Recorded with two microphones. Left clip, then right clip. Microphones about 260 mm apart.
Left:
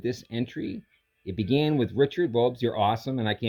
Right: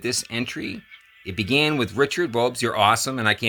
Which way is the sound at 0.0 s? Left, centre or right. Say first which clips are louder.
Right 5 dB; centre.